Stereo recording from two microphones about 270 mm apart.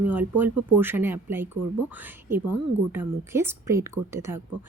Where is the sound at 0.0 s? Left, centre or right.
Centre.